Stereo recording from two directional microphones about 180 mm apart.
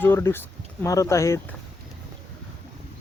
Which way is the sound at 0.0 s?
10° left (ahead or behind).